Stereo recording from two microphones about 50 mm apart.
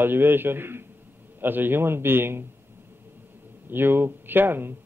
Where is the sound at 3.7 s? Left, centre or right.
Right.